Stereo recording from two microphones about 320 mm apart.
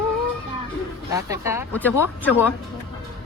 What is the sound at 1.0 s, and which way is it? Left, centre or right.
Speech, centre.